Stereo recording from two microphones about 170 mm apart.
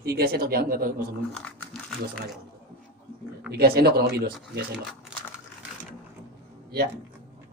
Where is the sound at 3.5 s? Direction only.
70° right (ahead or behind).